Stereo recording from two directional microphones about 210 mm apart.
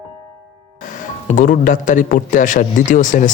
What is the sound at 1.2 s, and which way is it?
A man's voice, 40° left (ahead or behind).